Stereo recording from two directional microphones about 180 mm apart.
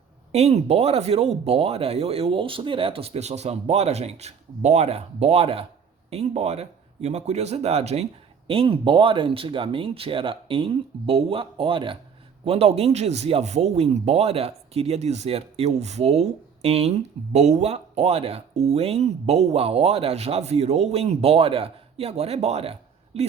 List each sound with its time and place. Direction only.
0.3 s speech: 35° right (ahead or behind)